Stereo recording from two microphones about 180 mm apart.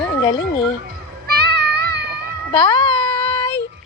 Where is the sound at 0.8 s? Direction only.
65° right (ahead or behind).